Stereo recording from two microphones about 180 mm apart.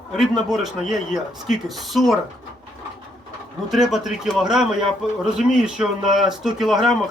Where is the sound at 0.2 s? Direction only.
Centre (ahead or behind).